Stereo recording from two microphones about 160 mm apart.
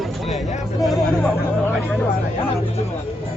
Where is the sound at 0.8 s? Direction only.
Centre (ahead or behind).